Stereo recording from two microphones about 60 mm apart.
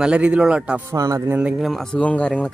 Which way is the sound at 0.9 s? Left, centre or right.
Right.